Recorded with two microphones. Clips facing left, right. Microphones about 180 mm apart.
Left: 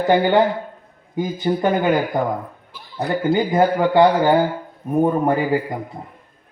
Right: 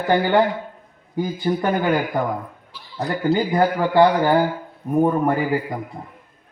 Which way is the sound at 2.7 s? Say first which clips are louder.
Left 2 dB; 50° left (ahead or behind).